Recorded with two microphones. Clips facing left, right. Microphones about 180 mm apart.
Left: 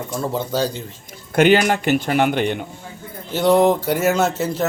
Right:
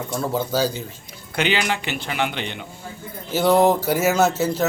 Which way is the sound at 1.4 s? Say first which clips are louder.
Left 8 dB; 45° left (ahead or behind).